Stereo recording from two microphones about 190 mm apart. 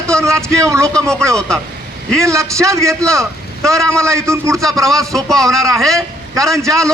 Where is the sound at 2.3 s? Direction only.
15° right (ahead or behind).